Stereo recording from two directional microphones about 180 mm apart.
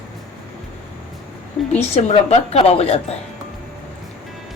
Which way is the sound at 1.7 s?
35° left (ahead or behind).